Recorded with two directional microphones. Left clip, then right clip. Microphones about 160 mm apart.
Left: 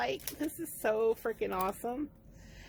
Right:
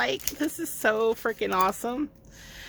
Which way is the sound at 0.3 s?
30° right (ahead or behind).